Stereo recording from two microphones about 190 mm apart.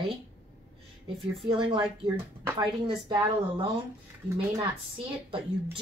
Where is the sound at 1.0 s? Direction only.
25° right (ahead or behind).